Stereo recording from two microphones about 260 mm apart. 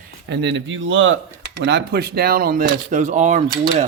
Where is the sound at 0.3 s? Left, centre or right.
Right.